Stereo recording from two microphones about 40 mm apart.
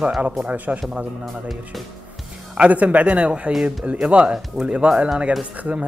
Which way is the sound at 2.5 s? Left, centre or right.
Right.